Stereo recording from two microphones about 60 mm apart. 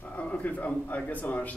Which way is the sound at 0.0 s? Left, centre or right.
Left.